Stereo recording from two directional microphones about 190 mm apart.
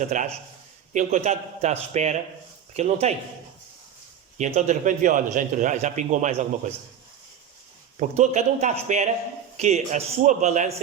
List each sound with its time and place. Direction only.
0.1 s a man's voice: 40° right (ahead or behind)
4.4 s a man's voice: 40° right (ahead or behind)
7.9 s a man's voice: 35° right (ahead or behind)